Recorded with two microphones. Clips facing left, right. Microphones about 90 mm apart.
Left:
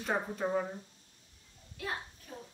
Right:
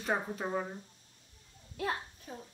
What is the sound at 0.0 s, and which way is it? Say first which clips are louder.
Speech: left 1 dB; 5° right (ahead or behind).